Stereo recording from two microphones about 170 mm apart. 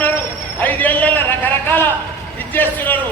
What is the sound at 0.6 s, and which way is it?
Basketball bounce, 10° left (ahead or behind).